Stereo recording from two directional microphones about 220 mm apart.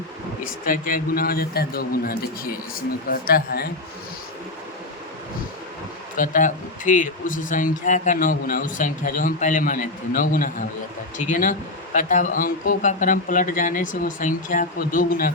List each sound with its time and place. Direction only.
0.6 s speech: 40° left (ahead or behind)
6.1 s speech: 35° left (ahead or behind)